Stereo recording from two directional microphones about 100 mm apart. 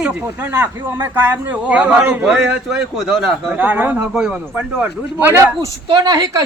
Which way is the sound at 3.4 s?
20° right (ahead or behind).